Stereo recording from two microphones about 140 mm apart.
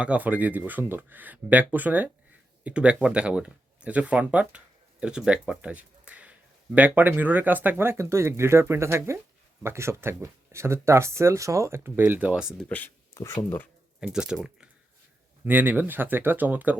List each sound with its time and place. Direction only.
0.0 s speech: 10° right (ahead or behind)
12.6 s speech: 10° left (ahead or behind)
14.0 s speech: 5° right (ahead or behind)